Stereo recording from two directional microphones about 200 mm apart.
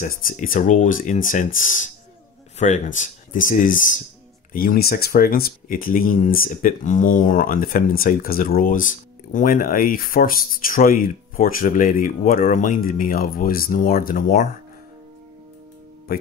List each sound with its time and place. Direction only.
0.0 s speech: 40° left (ahead or behind)
2.6 s speech: 40° left (ahead or behind)